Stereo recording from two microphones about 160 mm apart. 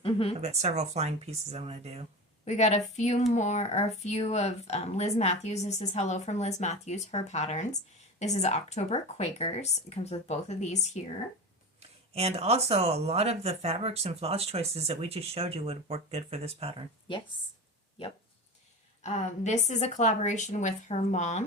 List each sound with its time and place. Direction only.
0.0 s a sound: 35° left (ahead or behind)
0.3 s speech: 45° right (ahead or behind)
2.4 s speech: 45° left (ahead or behind)
11.8 s speech: 40° right (ahead or behind)
19.0 s speech: 45° left (ahead or behind)